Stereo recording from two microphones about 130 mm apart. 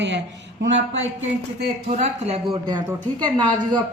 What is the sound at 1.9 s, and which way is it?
Speech, 60° right (ahead or behind).